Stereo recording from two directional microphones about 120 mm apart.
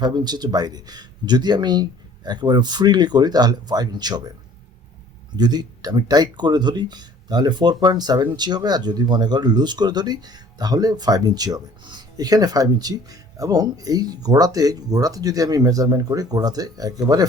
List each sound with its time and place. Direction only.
0.0 s speech: 35° right (ahead or behind)
5.4 s speech: 35° right (ahead or behind)